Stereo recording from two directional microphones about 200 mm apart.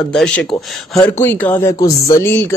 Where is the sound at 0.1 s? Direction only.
5° left (ahead or behind).